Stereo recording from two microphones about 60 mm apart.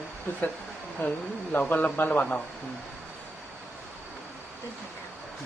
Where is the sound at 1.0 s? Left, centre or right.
Left.